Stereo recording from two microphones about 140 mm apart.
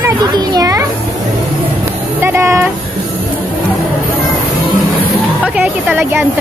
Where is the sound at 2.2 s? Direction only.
20° right (ahead or behind).